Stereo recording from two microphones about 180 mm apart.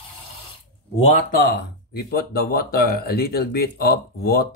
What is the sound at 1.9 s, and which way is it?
Speech, 60° left (ahead or behind).